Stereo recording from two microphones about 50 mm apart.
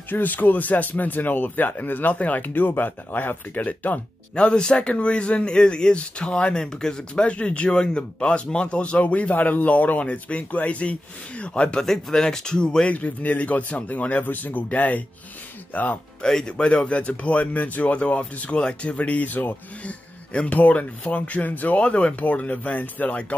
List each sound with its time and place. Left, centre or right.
0.1 s speech: left
4.4 s speech: centre
11.8 s speech: centre
12.9 s speech: left
16.2 s speech: centre; by 23.2 s left